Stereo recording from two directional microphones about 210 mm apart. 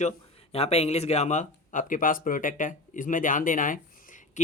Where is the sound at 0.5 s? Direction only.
30° left (ahead or behind).